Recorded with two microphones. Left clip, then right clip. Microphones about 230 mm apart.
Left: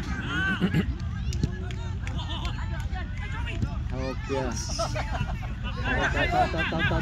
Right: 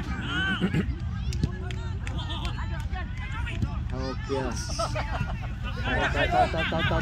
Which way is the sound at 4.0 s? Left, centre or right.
Left.